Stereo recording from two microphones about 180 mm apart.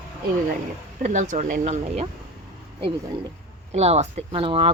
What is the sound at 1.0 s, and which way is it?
Speech, 40° right (ahead or behind).